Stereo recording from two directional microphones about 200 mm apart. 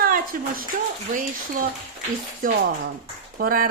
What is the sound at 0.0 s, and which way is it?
Speech, 45° right (ahead or behind).